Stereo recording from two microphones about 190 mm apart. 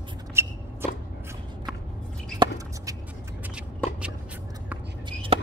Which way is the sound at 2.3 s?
20° right (ahead or behind).